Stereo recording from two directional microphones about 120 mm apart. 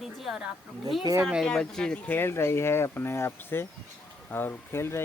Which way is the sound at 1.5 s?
5° left (ahead or behind).